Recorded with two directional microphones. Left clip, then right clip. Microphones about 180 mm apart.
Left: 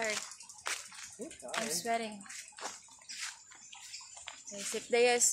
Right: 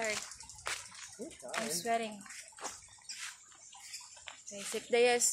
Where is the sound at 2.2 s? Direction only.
15° left (ahead or behind).